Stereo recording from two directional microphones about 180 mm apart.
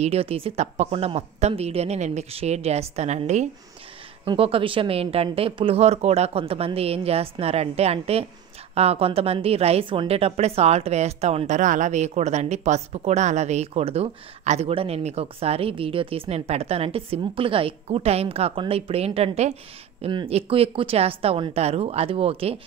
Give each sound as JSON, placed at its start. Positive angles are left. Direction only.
{"t": 0.0, "sound": "a woman's voice", "side_deg": -35}